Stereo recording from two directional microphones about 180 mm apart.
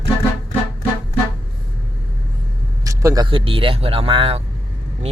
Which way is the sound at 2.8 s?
20° right (ahead or behind).